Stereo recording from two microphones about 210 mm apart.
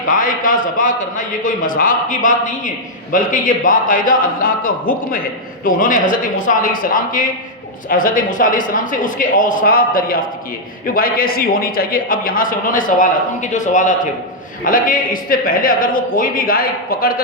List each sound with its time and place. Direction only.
0.1 s a man's voice: 40° left (ahead or behind)